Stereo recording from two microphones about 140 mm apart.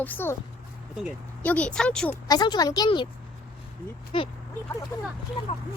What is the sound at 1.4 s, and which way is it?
Speech, 10° left (ahead or behind).